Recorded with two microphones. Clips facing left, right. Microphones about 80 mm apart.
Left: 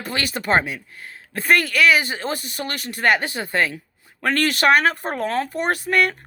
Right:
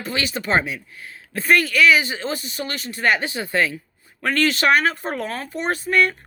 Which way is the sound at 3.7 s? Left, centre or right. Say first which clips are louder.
Right 1 dB; left.